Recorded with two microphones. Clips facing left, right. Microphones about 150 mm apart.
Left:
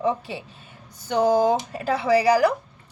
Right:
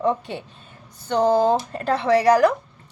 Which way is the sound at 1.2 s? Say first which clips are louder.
Right 1 dB; 10° left (ahead or behind).